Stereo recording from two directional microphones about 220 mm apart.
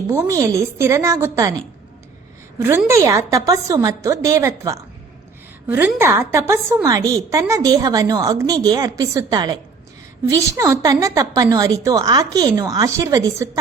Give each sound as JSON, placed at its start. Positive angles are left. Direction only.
{"t": 0.1, "sound": "a woman's voice", "side_deg": -15}
{"t": 2.6, "sound": "a woman's voice", "side_deg": -10}
{"t": 5.6, "sound": "a woman's voice", "side_deg": -10}